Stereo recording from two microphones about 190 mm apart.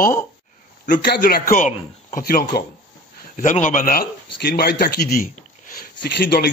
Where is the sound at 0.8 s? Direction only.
45° left (ahead or behind).